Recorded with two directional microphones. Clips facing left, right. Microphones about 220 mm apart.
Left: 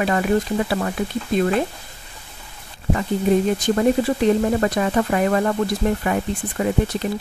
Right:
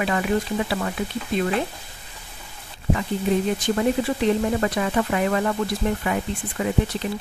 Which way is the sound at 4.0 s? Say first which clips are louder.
Left 3 dB; 40° left (ahead or behind).